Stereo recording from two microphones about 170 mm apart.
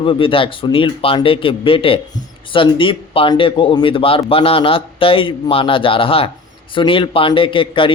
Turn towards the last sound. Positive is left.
turn(degrees=30)  # may be behind; listen again after turning